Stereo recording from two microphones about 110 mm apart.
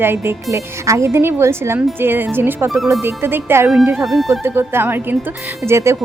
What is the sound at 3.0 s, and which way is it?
Speech, 20° right (ahead or behind).